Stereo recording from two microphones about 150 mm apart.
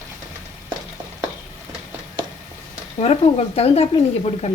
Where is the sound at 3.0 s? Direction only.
45° left (ahead or behind).